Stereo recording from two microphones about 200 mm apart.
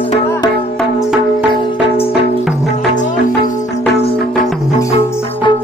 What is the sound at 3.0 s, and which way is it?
Music, 40° left (ahead or behind).